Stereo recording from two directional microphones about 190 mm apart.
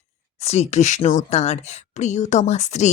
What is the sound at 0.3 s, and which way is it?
Speech, 35° left (ahead or behind).